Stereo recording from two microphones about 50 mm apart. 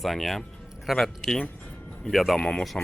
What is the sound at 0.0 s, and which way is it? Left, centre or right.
Speech, centre.